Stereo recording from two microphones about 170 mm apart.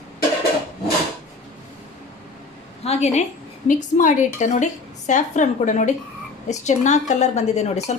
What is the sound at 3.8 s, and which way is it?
A woman's voice, 50° left (ahead or behind).